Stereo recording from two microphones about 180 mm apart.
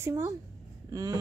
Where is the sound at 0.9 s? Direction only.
20° right (ahead or behind).